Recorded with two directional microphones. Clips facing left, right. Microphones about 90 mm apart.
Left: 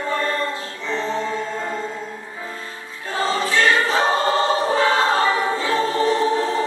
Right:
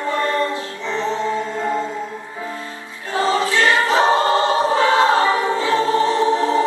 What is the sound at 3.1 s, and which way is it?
Choir, 25° right (ahead or behind).